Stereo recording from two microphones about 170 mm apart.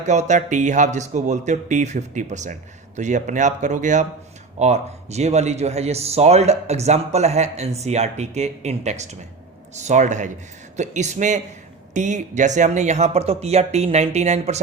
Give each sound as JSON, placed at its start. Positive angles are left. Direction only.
{"t": 0.0, "sound": "a man's voice", "side_deg": -45}